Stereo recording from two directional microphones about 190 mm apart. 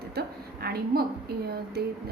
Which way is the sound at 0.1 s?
55° right (ahead or behind).